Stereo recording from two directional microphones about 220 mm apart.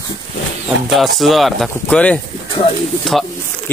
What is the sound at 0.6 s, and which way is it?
Speech, centre (ahead or behind).